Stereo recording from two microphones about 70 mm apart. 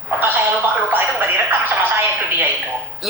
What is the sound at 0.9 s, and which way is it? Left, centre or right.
Music, right.